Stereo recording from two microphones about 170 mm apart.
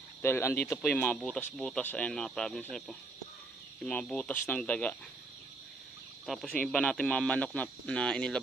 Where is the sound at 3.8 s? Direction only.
5° left (ahead or behind).